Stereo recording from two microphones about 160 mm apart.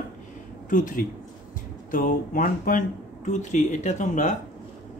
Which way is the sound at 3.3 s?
50° left (ahead or behind).